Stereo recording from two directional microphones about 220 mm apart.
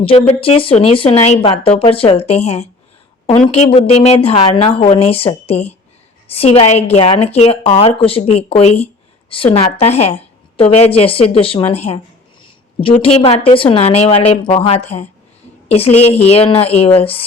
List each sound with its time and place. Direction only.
0.3 s speech: 25° left (ahead or behind)